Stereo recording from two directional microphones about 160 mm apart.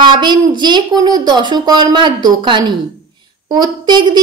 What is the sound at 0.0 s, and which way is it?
A woman's voice, 30° right (ahead or behind).